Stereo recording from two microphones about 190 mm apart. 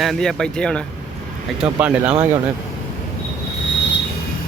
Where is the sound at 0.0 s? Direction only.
Centre (ahead or behind).